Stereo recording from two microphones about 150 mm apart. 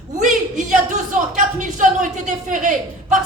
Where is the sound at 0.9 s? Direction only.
55° right (ahead or behind).